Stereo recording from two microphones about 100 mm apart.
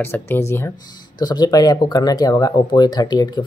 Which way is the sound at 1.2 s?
45° left (ahead or behind).